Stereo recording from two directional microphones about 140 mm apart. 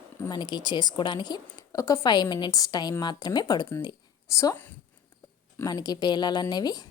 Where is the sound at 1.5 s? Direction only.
20° left (ahead or behind).